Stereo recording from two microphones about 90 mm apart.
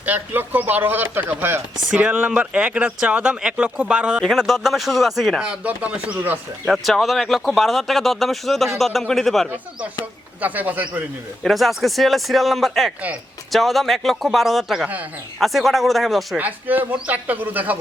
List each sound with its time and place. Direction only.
0.0 s chopping: 20° right (ahead or behind)
4.2 s speech: centre (ahead or behind)
5.4 s chopping: 15° right (ahead or behind)
6.7 s speech: centre (ahead or behind)
10.4 s speech: 20° right (ahead or behind)
11.4 s speech: centre (ahead or behind)
16.4 s speech: 20° right (ahead or behind)